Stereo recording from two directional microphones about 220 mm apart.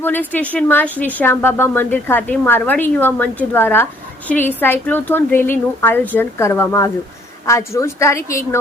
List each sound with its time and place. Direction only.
0.0 s a woman's voice: 10° left (ahead or behind)